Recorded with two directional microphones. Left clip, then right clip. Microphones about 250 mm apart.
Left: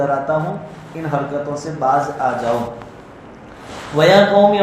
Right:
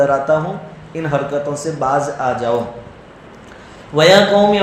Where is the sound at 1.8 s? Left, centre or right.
Right.